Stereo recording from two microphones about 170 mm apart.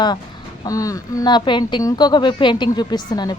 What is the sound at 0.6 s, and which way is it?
A woman's voice, 20° left (ahead or behind).